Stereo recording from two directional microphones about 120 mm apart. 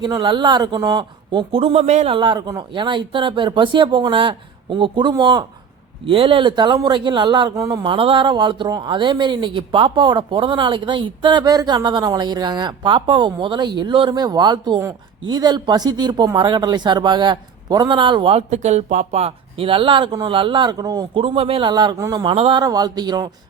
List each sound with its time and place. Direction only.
0.0 s speech: 40° right (ahead or behind); by 2.0 s 70° right (ahead or behind)
2.0 s speech: 40° right (ahead or behind)
6.1 s speech: 50° right (ahead or behind)
7.5 s speech: 30° right (ahead or behind)
7.9 s speech: 45° right (ahead or behind)
20.1 s speech: 30° right (ahead or behind)
20.3 s speech: 45° right (ahead or behind)
21.2 s a man's voice: 50° right (ahead or behind)
21.7 s speech: 35° right (ahead or behind)
22.2 s a man's voice: 45° right (ahead or behind)
22.6 s speech: 35° right (ahead or behind)